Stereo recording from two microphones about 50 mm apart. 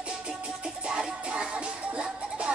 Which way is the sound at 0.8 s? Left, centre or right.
Centre.